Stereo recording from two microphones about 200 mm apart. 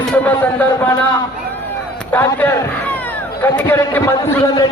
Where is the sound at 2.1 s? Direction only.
10° left (ahead or behind).